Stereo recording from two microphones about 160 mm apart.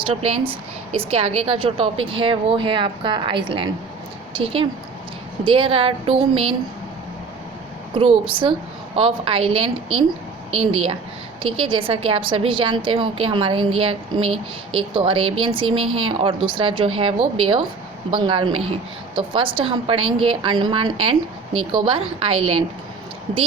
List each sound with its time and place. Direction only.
0.0 s a woman's voice: 35° right (ahead or behind)
7.9 s a woman's voice: 30° right (ahead or behind)
11.4 s a woman's voice: 35° right (ahead or behind)